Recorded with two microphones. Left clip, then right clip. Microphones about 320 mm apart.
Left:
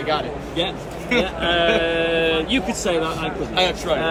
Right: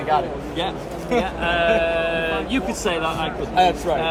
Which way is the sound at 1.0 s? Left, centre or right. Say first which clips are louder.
Left 1 dB; centre.